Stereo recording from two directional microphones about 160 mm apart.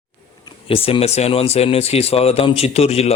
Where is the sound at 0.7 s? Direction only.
35° left (ahead or behind).